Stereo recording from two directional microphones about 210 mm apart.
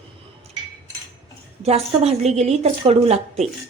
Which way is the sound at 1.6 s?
30° right (ahead or behind).